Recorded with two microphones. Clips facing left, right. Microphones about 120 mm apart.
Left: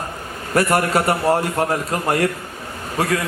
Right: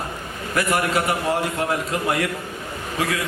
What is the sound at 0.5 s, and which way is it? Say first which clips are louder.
Speech: left 4 dB; 40° left (ahead or behind).